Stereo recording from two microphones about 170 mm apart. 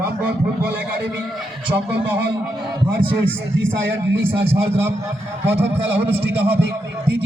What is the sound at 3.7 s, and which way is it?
Speech, 90° right.